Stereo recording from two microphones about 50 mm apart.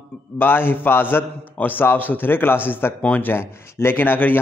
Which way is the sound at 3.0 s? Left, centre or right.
Left.